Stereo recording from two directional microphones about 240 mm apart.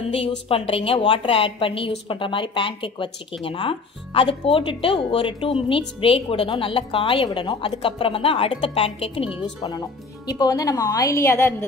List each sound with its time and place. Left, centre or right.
0.5 s speech: left